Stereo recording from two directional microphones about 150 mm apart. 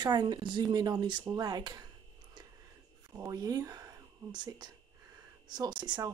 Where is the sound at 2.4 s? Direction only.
30° right (ahead or behind).